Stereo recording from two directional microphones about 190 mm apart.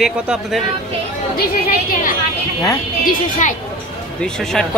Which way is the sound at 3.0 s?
45° left (ahead or behind).